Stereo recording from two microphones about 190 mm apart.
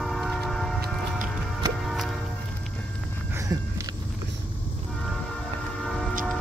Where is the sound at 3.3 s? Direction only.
15° right (ahead or behind).